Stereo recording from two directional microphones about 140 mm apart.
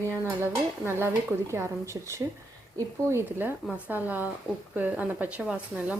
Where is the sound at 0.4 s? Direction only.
15° right (ahead or behind).